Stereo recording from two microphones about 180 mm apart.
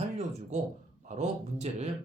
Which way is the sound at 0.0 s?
40° right (ahead or behind).